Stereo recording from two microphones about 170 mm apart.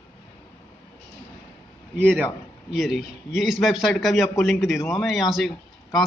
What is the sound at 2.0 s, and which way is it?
A man's voice, 10° right (ahead or behind).